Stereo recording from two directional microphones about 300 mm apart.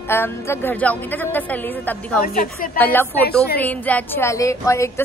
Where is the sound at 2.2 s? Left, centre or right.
Left.